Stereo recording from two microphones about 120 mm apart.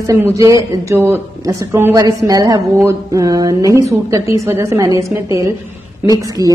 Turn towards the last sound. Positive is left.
turn(degrees=-30)  # may be behind; listen again after turning